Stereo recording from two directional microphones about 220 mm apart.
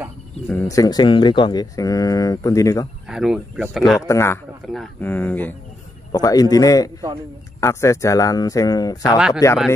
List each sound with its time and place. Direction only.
0.5 s speech: 10° left (ahead or behind)
3.1 s speech: centre (ahead or behind)
4.1 s speech: 10° left (ahead or behind)